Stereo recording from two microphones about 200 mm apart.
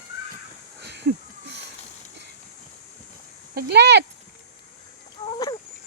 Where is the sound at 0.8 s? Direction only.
55° right (ahead or behind).